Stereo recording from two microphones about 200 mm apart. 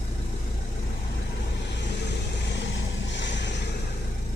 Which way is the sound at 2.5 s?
60° left (ahead or behind).